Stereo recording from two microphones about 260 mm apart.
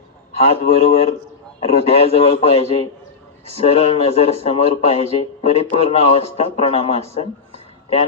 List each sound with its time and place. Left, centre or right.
0.3 s speech: left